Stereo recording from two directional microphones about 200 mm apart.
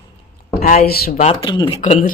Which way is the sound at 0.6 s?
45° left (ahead or behind).